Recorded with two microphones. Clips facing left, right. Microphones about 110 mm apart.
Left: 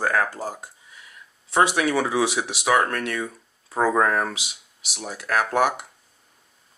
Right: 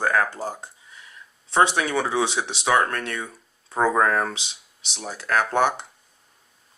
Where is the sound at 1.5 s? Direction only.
30° right (ahead or behind).